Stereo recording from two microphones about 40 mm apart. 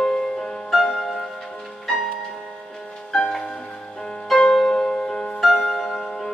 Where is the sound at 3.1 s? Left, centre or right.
Centre.